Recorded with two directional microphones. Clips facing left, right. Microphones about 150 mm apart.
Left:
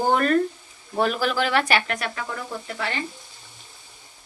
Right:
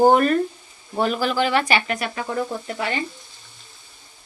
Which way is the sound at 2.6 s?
20° right (ahead or behind).